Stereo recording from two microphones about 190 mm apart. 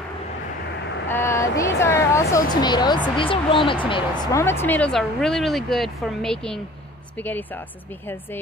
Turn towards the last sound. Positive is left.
turn(degrees=10)  # may be behind; listen again after turning